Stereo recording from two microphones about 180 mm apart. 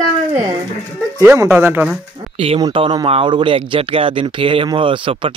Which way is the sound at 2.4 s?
30° right (ahead or behind).